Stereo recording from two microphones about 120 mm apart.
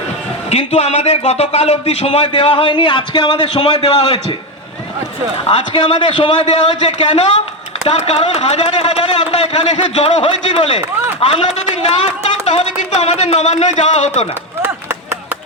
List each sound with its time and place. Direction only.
0.5 s a man's voice: 65° left (ahead or behind)
5.5 s a man's voice: 50° left (ahead or behind)
6.4 s speech: 70° left (ahead or behind)
10.0 s a man's voice: 60° left (ahead or behind)